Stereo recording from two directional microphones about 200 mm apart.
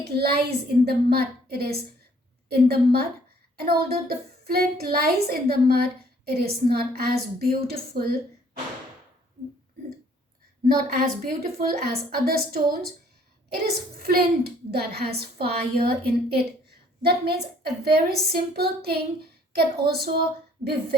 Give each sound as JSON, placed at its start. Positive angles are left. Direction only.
{"t": 0.2, "sound": "a woman's voice", "side_deg": -50}
{"t": 10.7, "sound": "a woman's voice", "side_deg": -45}